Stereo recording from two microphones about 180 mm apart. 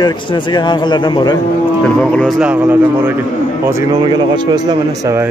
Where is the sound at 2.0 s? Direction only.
5° left (ahead or behind).